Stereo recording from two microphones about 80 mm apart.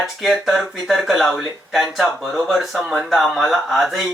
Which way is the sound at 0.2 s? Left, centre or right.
Centre.